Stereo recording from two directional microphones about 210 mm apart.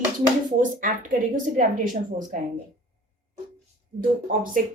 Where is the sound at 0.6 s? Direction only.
40° right (ahead or behind).